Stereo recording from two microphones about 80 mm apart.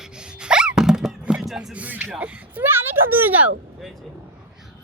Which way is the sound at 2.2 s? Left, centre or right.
Centre.